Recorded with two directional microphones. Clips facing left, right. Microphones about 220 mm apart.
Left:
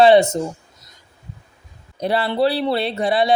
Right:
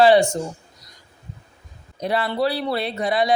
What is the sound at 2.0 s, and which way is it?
Speech, 30° left (ahead or behind).